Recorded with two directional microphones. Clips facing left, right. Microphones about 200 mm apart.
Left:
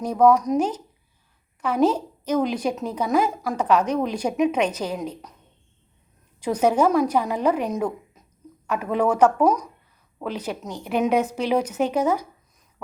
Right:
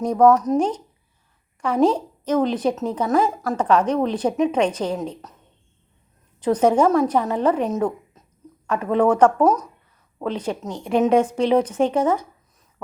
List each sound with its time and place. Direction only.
0.0 s speech: 5° left (ahead or behind)
6.4 s speech: 10° left (ahead or behind)
7.7 s a sound: 10° left (ahead or behind)
8.6 s speech: 10° left (ahead or behind)
10.6 s speech: 25° right (ahead or behind)
10.8 s speech: 5° left (ahead or behind)